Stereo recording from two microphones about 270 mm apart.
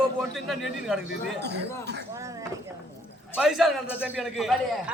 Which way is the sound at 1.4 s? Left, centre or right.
Right.